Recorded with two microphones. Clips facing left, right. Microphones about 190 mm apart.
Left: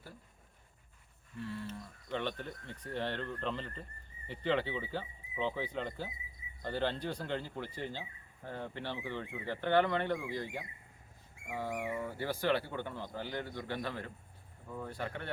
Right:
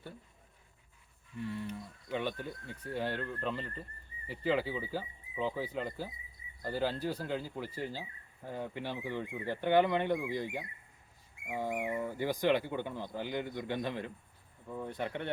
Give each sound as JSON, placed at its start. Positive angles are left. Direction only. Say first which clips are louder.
{"t": 1.5, "sound": "speech", "louder": "right 3 dB", "side_deg": -15}